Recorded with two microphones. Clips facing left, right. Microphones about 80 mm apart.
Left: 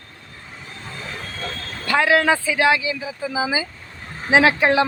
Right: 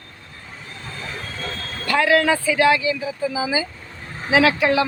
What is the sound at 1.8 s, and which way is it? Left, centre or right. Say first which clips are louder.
Speech: even; left.